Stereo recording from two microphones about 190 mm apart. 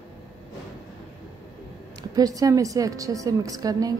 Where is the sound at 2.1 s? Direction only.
20° right (ahead or behind).